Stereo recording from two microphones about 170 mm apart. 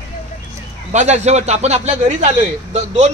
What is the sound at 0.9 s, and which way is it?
Speech, 45° right (ahead or behind).